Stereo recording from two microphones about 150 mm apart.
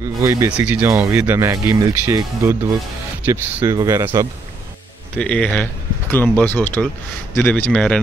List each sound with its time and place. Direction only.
0.0 s speech: 20° right (ahead or behind)
0.5 s speech: 10° right (ahead or behind)
0.8 s speech: 20° right (ahead or behind)
5.1 s speech: 5° left (ahead or behind)